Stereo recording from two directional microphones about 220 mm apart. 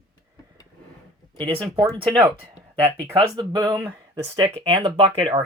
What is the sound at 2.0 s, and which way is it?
Speech, 20° right (ahead or behind).